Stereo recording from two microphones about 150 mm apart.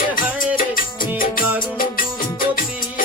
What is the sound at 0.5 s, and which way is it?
Music, 70° left (ahead or behind).